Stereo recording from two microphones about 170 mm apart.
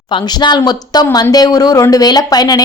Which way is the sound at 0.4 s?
25° left (ahead or behind).